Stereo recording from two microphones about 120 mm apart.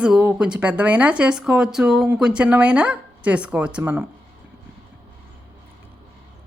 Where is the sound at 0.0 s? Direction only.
10° right (ahead or behind).